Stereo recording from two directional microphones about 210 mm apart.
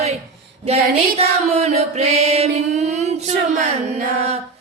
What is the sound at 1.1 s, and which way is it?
Music, 30° right (ahead or behind).